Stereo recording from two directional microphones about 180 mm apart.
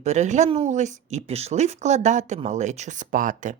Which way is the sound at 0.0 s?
40° right (ahead or behind).